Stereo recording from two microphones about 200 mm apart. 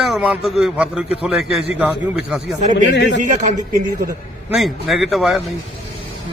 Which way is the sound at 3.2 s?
40° right (ahead or behind).